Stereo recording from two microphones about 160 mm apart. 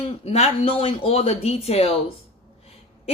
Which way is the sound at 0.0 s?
45° left (ahead or behind).